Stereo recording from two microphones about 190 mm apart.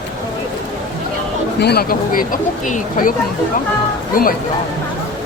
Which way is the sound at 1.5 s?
60° left (ahead or behind).